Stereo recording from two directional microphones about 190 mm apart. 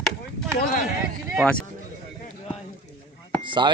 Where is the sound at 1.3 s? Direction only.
Centre (ahead or behind).